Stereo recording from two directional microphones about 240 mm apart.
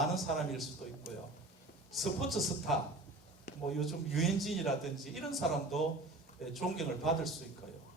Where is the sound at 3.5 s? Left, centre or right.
Left.